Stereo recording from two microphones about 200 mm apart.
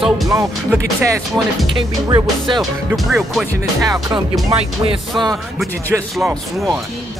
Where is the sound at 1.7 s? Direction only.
20° right (ahead or behind).